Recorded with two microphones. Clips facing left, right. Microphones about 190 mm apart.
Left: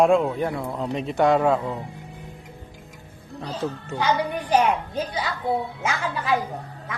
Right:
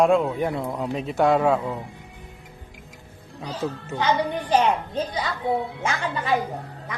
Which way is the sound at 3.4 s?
5° right (ahead or behind).